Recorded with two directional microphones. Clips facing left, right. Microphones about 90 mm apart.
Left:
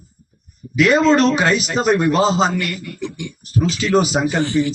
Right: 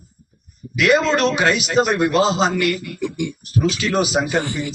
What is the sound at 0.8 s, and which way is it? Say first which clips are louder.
Speech: left 3 dB; centre (ahead or behind).